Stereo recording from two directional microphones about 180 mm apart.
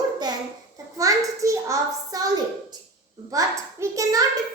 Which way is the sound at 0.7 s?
20° right (ahead or behind).